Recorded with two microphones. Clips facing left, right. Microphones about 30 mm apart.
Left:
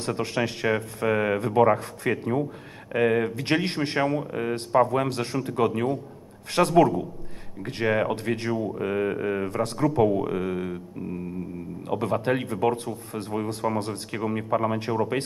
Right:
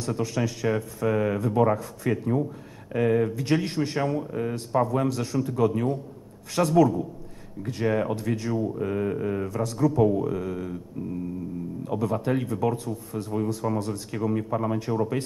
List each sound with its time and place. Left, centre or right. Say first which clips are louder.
0.0 s speech: left 1 dB; left
8.5 s speech: left 1 dB; left
9.5 s speech: even; left
10.0 s speech: left 1 dB; left
11.8 s speech: left 2 dB; left
14.1 s speech: left 1 dB; left